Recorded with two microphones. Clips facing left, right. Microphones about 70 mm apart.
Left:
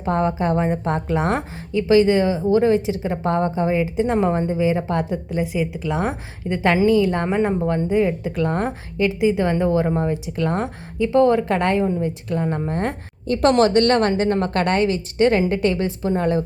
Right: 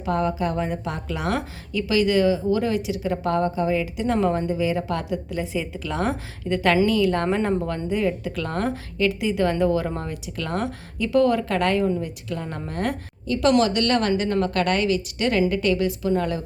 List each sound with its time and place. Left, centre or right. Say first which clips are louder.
0.0 s a woman's voice: left 3 dB; left
13.2 s a woman's voice: left 3 dB; left